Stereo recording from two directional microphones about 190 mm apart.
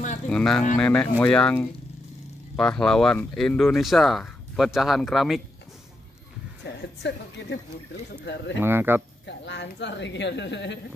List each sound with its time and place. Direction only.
0.3 s speech: 5° left (ahead or behind)
7.0 s a woman's voice: 65° left (ahead or behind)
8.5 s speech: 10° right (ahead or behind)
9.2 s a woman's voice: 70° left (ahead or behind)